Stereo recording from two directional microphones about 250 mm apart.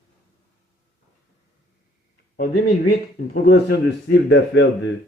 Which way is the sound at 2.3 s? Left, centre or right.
Left.